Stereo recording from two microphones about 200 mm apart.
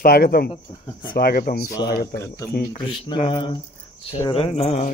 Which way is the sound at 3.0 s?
25° left (ahead or behind).